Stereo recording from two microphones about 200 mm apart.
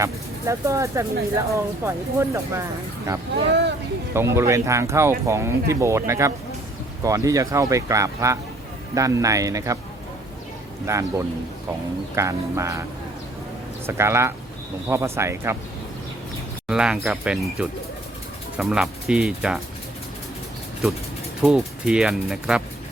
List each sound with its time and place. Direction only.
0.0 s speech: 15° right (ahead or behind)
3.3 s speech: 55° right (ahead or behind)
4.1 s speech: 15° right (ahead or behind)
10.9 s speech: 15° right (ahead or behind)
12.1 s speech: 15° right (ahead or behind)
13.8 s speech: 10° right (ahead or behind)
16.6 s speech: 5° right (ahead or behind)
21.4 s speech: 5° right (ahead or behind)